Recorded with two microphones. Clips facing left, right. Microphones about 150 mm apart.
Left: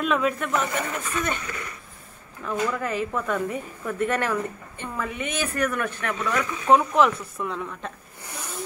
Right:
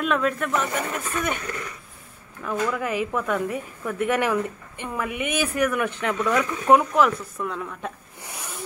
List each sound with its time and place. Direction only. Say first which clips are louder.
0.0 s speech: even; centre (ahead or behind)
2.7 s speech: right 1 dB; 10° right (ahead or behind)
6.9 s speech: even; centre (ahead or behind)
8.2 s a sound: left 2 dB; 15° right (ahead or behind)